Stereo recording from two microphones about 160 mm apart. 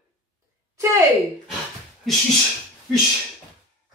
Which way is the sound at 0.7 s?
15° right (ahead or behind).